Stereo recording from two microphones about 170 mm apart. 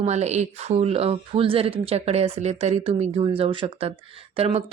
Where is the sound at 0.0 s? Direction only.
40° right (ahead or behind).